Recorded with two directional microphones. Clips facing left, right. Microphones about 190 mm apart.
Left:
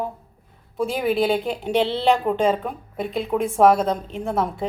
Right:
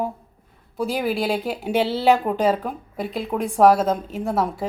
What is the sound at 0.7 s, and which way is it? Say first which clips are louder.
A woman's voice: left 2 dB; centre (ahead or behind).